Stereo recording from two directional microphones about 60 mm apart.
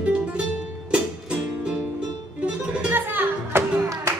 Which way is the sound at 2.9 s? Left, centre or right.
Right.